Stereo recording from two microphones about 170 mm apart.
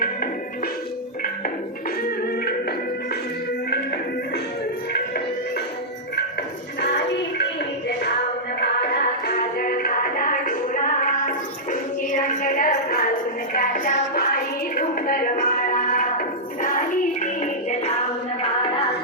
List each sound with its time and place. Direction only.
2.0 s music: 65° left (ahead or behind)
6.8 s music: 80° left
9.2 s music: 60° left (ahead or behind)